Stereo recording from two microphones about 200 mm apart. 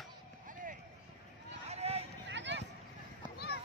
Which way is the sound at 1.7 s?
30° right (ahead or behind).